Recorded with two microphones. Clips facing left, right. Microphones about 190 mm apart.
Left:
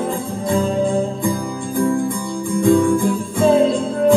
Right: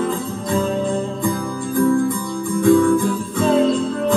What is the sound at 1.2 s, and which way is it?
Music, 15° left (ahead or behind).